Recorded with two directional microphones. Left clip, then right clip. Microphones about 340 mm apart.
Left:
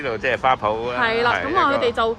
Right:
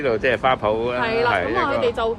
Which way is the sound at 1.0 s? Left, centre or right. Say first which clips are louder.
Left 2 dB; left.